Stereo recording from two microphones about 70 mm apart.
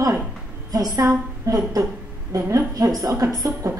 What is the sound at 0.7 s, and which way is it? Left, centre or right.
A woman's voice, right.